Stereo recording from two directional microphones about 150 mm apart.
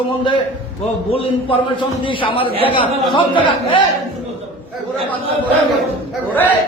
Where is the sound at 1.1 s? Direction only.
40° left (ahead or behind).